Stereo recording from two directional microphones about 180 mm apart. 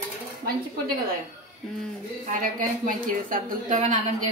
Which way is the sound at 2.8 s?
50° right (ahead or behind).